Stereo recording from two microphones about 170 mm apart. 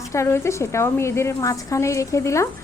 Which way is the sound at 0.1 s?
15° left (ahead or behind).